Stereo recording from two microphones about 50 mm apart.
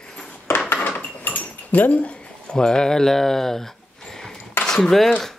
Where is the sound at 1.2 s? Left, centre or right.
Left; by 4.3 s centre.